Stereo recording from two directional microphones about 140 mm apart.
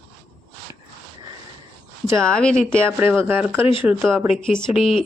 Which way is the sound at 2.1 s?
5° left (ahead or behind).